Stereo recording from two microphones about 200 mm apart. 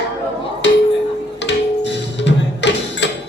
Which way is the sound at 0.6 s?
60° left (ahead or behind).